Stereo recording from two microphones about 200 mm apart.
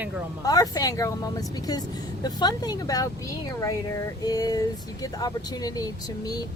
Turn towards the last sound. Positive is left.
turn(degrees=20)  # may be behind; listen again after turning